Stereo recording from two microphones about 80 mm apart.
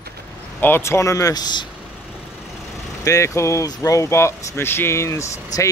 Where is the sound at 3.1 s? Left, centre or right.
Left.